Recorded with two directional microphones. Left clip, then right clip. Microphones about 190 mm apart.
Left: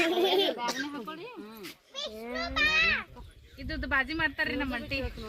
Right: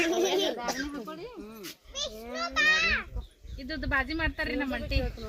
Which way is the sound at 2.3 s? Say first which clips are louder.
Right 2 dB; 60° right (ahead or behind).